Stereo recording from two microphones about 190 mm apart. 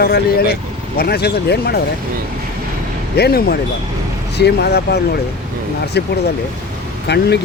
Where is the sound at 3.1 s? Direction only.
55° left (ahead or behind).